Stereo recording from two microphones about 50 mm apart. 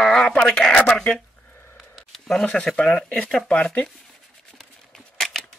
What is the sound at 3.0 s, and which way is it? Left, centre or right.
Speech, centre.